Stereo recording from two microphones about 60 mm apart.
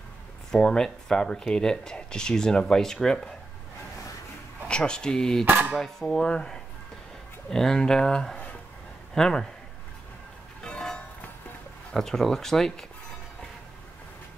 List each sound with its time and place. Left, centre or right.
0.5 s speech: centre
4.6 s speech: centre
5.4 s speech: right
5.8 s speech: centre
10.6 s music: centre
11.9 s speech: centre